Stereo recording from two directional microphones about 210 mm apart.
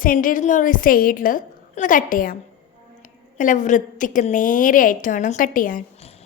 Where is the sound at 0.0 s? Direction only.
40° left (ahead or behind).